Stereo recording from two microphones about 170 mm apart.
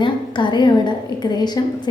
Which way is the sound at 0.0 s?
25° left (ahead or behind).